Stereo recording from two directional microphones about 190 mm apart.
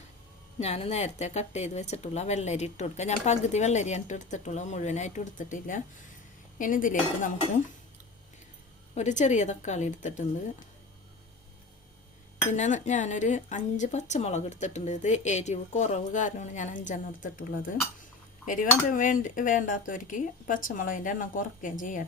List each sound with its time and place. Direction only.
0.6 s a woman's voice: 35° left (ahead or behind)
9.0 s a woman's voice: 40° left (ahead or behind)
12.5 s a woman's voice: 40° left (ahead or behind)